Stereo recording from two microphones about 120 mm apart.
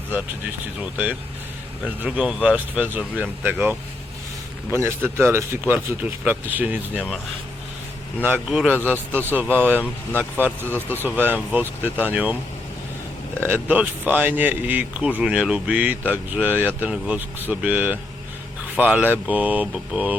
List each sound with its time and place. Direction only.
0.8 s speech: 10° right (ahead or behind)
4.8 s speech: 20° right (ahead or behind)
8.4 s speech: 10° right (ahead or behind)
13.5 s speech: 15° right (ahead or behind)